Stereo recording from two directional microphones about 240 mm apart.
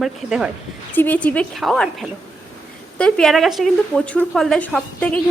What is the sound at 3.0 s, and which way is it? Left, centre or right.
A woman's voice, centre.